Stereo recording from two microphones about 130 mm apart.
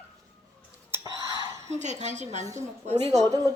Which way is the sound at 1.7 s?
60° right (ahead or behind).